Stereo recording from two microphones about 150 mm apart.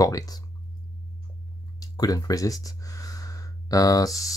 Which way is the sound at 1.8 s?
25° left (ahead or behind).